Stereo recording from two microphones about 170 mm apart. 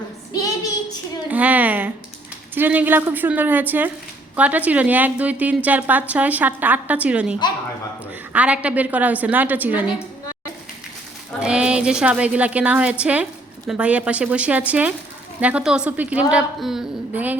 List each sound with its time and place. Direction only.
0.3 s child singing: 20° left (ahead or behind)
1.3 s a sound: 10° right (ahead or behind)
2.6 s a woman's voice: 10° right (ahead or behind)
11.3 s a woman's voice: 5° right (ahead or behind)